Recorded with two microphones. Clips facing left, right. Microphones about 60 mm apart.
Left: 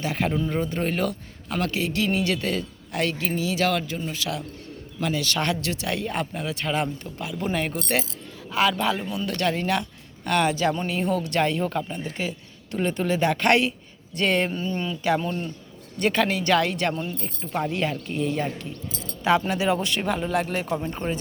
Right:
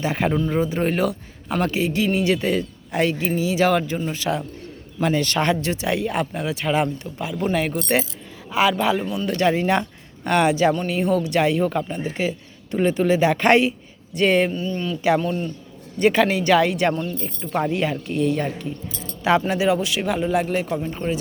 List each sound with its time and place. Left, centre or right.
0.0 s speech: right
0.4 s a man's voice: centre; by 5.4 s right
5.4 s speech: right
10.8 s speech: centre; by 13.7 s right
14.2 s speech: centre
14.5 s speech: left
15.1 s speech: centre
16.9 s speech: centre
17.4 s speech: centre
19.2 s speech: centre